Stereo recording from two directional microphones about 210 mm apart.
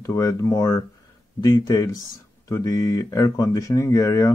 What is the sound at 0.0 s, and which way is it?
Speech, 15° left (ahead or behind).